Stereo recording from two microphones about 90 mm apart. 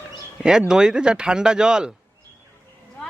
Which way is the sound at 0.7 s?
10° right (ahead or behind).